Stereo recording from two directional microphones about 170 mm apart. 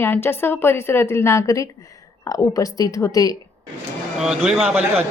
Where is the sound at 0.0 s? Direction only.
15° left (ahead or behind).